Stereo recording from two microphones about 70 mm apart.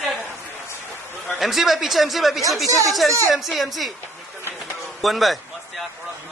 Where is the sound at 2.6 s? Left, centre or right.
Right.